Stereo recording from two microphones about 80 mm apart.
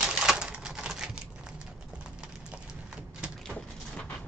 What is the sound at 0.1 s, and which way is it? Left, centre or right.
Typewriter, centre.